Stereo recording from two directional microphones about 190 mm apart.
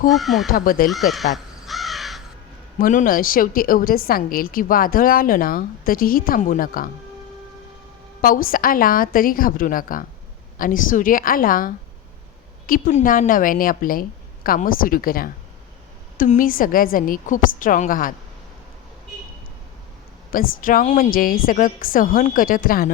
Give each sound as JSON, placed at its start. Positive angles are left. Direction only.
{"t": 0.1, "sound": "speech", "side_deg": 0}
{"t": 0.5, "sound": "a woman's voice", "side_deg": 50}
{"t": 0.9, "sound": "crow", "side_deg": 0}
{"t": 2.7, "sound": "a woman's voice", "side_deg": 45}
{"t": 8.2, "sound": "a woman's voice", "side_deg": 50}
{"t": 20.3, "sound": "a woman's voice", "side_deg": 45}